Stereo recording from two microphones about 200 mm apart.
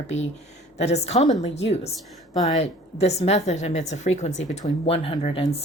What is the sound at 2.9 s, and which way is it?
A woman's voice, 30° left (ahead or behind).